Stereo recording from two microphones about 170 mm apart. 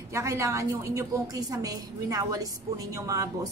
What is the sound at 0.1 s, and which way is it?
A woman's voice, 15° right (ahead or behind).